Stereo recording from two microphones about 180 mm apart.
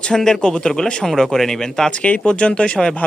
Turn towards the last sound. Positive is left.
turn(degrees=5)  # may be behind; listen again after turning